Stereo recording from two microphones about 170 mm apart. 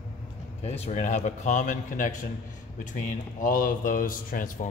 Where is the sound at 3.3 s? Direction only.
50° left (ahead or behind).